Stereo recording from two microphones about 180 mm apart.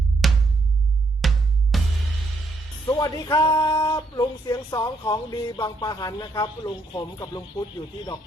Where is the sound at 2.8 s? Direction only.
20° left (ahead or behind).